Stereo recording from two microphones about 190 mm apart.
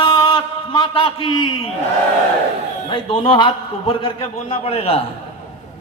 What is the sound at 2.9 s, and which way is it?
A man's voice, 25° left (ahead or behind).